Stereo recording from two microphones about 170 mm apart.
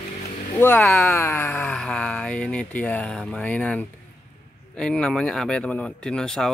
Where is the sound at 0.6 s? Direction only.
10° left (ahead or behind).